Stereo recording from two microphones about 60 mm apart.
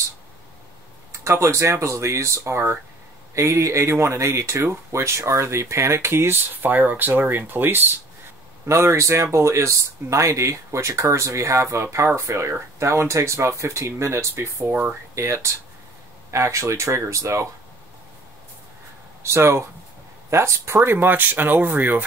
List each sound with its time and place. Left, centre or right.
1.2 s speech: right
6.5 s speech: right
8.6 s speech: right
14.7 s speech: right
15.1 s speech: right
19.2 s speech: right